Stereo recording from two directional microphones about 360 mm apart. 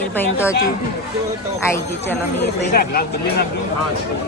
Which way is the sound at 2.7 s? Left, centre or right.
Left.